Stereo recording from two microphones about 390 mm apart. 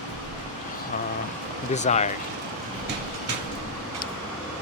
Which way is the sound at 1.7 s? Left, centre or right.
Centre.